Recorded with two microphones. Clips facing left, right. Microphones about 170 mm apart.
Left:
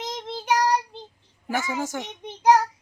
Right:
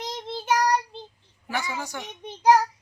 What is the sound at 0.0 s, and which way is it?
Child singing, 20° left (ahead or behind).